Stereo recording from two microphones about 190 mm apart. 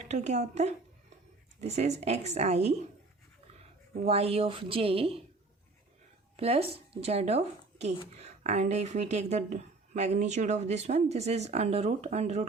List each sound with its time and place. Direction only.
0.1 s a woman's voice: 35° right (ahead or behind)
4.0 s a woman's voice: 30° right (ahead or behind)
6.3 s a woman's voice: 30° right (ahead or behind)